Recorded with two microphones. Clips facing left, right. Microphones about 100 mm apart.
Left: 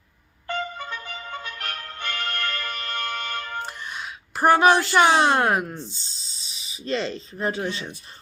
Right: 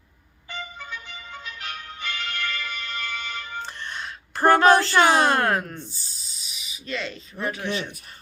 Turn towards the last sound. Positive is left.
turn(degrees=30)  # may be behind; listen again after turning